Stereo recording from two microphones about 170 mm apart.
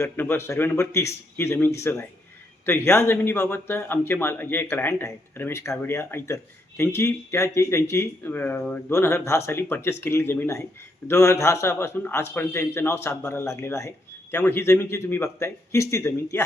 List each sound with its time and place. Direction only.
0.0 s speech: 15° left (ahead or behind)